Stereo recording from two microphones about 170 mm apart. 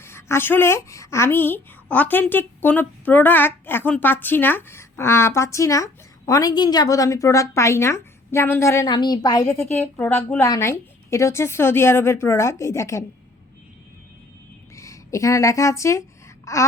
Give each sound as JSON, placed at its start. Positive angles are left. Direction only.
{"t": 0.0, "sound": "speech", "side_deg": 15}
{"t": 14.8, "sound": "speech", "side_deg": 20}